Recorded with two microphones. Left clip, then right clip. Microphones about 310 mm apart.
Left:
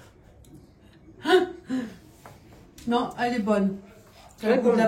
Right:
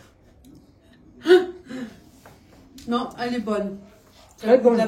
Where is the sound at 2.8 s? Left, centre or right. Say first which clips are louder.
Left 1 dB; centre.